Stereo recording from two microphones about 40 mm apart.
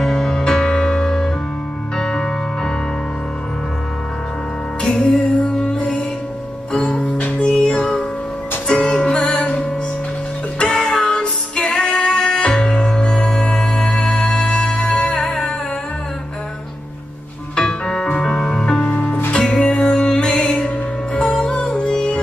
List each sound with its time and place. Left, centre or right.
0.0 s music: centre
5.0 s music: left
7.7 s music: centre
10.7 s music: centre
13.1 s music: centre
15.2 s music: centre
17.6 s music: centre
20.2 s music: centre
20.5 s music: left